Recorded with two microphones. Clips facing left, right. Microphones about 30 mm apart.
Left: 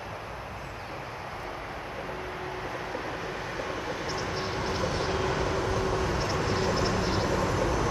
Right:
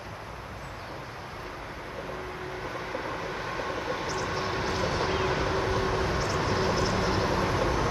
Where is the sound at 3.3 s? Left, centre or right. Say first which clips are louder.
Right 1 dB; centre.